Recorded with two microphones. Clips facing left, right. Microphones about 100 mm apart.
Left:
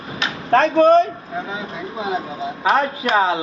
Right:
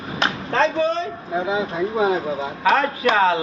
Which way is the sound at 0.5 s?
60° left (ahead or behind).